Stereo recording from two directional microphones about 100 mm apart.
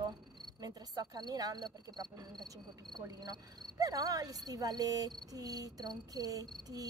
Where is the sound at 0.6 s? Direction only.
40° right (ahead or behind).